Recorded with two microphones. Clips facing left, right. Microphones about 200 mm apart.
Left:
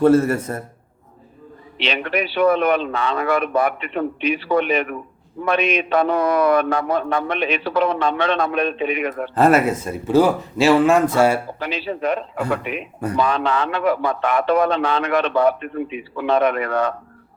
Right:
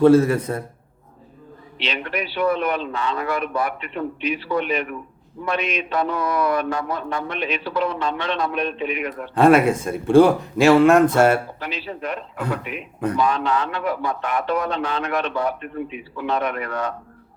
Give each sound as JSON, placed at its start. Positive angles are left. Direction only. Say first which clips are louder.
{"t": 0.0, "sound": "a man's voice", "louder": "right 1 dB", "side_deg": 5}
{"t": 1.8, "sound": "a man's voice", "louder": "left 4 dB", "side_deg": 65}
{"t": 9.3, "sound": "a man's voice", "louder": "right 2 dB", "side_deg": 5}
{"t": 11.6, "sound": "a man's voice", "louder": "left 6 dB", "side_deg": 90}
{"t": 13.1, "sound": "speech", "louder": "left 2 dB", "side_deg": 75}